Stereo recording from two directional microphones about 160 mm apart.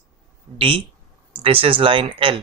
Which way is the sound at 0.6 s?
35° right (ahead or behind).